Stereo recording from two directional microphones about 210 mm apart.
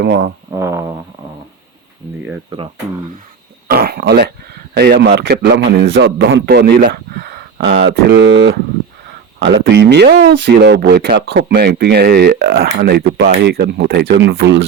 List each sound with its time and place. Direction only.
0.0 s speech: 50° right (ahead or behind)
0.5 s mantra: 15° right (ahead or behind)
3.7 s speech: 45° right (ahead or behind)